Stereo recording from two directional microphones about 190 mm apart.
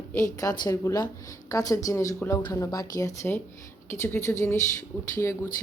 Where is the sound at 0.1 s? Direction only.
15° left (ahead or behind).